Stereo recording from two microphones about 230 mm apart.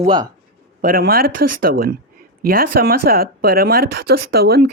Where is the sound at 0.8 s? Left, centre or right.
Right.